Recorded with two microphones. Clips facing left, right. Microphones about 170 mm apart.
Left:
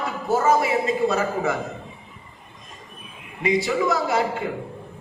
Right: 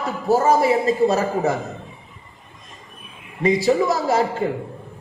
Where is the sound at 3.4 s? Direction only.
40° right (ahead or behind).